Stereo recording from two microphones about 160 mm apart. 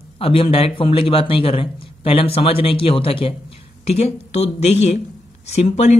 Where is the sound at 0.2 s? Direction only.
35° left (ahead or behind).